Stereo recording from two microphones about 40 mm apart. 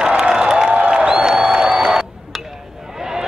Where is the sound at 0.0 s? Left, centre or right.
Centre.